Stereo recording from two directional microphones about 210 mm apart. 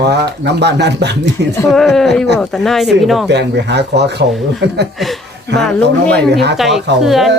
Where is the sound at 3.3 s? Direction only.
55° right (ahead or behind).